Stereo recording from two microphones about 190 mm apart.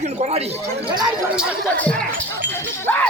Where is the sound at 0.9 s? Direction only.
20° right (ahead or behind).